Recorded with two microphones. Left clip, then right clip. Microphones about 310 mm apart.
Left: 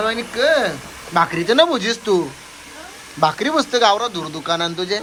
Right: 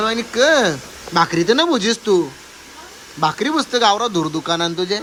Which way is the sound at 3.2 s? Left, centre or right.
Centre.